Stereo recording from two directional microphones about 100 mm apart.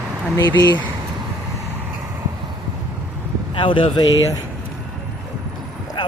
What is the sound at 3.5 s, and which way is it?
Speech, 60° left (ahead or behind).